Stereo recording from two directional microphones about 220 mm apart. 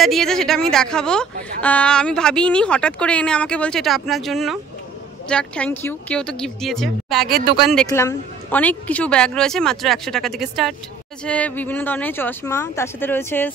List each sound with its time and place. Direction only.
0.0 s a woman's voice: centre (ahead or behind)
7.2 s speech: 45° right (ahead or behind)
7.5 s a woman's voice: centre (ahead or behind)